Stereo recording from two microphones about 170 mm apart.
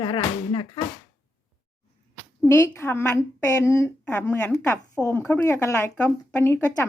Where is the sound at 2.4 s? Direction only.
15° left (ahead or behind).